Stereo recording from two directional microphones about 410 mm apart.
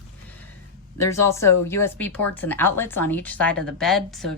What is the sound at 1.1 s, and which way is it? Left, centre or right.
A woman's voice, centre.